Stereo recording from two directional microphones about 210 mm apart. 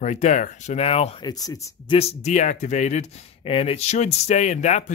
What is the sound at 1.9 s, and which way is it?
Speech, 30° left (ahead or behind).